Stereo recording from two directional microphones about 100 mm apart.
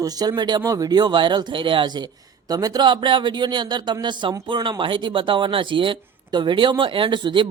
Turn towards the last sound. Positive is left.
turn(degrees=-55)  # may be behind; listen again after turning